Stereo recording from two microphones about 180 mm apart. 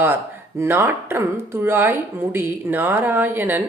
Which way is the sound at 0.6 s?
10° right (ahead or behind).